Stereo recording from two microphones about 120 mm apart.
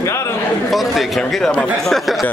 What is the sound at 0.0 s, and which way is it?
Speech, 25° left (ahead or behind).